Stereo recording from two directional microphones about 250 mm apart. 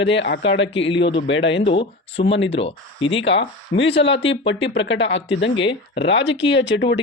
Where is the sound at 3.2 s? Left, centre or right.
Left.